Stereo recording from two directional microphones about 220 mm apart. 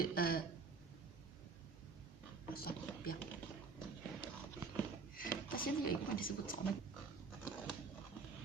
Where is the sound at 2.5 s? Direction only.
45° left (ahead or behind).